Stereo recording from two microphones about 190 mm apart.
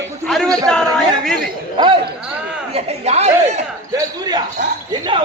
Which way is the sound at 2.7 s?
35° right (ahead or behind).